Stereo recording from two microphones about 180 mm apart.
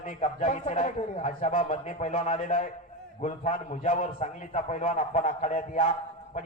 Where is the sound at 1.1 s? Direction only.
30° left (ahead or behind).